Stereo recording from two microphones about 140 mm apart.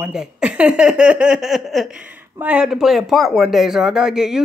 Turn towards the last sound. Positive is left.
turn(degrees=-5)  # may be behind; listen again after turning